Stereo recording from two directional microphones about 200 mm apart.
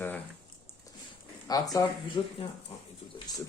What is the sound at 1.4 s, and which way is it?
Speech, 20° left (ahead or behind).